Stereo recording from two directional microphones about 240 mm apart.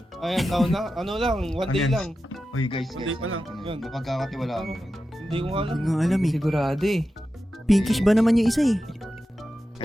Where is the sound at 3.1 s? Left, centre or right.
Right.